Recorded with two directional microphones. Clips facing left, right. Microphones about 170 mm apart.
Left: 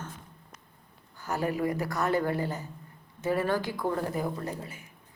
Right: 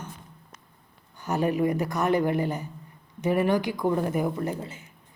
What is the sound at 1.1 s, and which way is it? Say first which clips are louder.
A woman's voice: right 5 dB; 20° right (ahead or behind).